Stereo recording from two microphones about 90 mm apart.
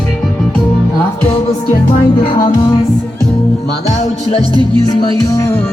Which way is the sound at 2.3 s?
45° left (ahead or behind).